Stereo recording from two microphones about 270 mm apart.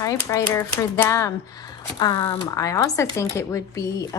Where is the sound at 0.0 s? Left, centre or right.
Centre.